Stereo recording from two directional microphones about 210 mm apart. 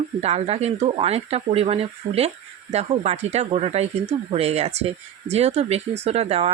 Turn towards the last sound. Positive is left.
turn(degrees=-30)  # may be behind; listen again after turning